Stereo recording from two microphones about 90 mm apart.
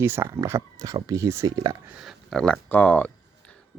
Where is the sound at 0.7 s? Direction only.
40° right (ahead or behind).